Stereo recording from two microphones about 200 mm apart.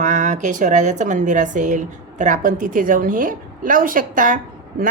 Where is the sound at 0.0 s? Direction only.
35° right (ahead or behind).